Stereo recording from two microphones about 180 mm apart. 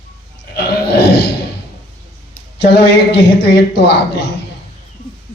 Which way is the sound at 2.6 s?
70° left (ahead or behind).